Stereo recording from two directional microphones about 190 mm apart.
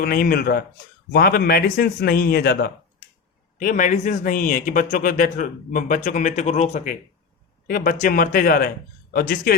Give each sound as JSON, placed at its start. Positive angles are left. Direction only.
{"t": 0.0, "sound": "speech", "side_deg": 50}
{"t": 3.6, "sound": "speech", "side_deg": 40}